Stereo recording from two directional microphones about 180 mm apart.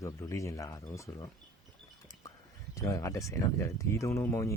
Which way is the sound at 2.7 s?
15° left (ahead or behind).